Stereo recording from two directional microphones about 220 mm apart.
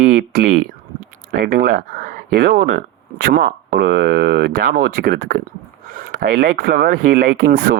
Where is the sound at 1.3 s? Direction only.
40° right (ahead or behind).